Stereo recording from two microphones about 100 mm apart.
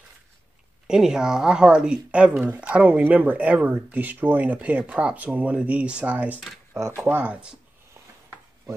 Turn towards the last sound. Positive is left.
turn(degrees=-10)  # may be behind; listen again after turning